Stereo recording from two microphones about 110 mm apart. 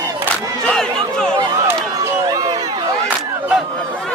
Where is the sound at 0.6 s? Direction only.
5° left (ahead or behind).